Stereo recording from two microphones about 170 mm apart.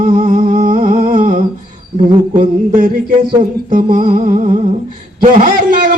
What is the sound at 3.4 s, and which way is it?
Humming, 55° right (ahead or behind).